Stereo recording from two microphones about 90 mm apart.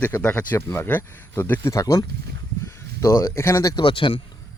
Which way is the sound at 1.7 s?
40° left (ahead or behind).